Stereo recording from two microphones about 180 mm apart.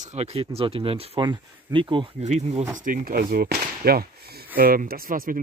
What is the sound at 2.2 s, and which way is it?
Speech, 40° right (ahead or behind).